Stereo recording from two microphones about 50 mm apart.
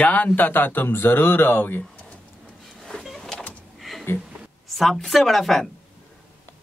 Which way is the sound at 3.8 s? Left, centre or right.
Centre.